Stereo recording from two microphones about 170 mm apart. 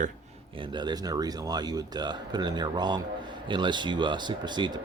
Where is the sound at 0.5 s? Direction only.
30° right (ahead or behind).